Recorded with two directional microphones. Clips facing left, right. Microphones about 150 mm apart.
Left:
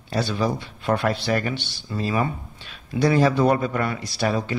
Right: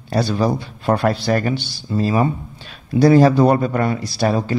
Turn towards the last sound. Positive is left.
turn(degrees=-40)  # may be behind; listen again after turning